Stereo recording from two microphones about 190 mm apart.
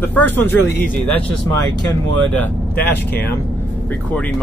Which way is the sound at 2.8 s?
10° left (ahead or behind).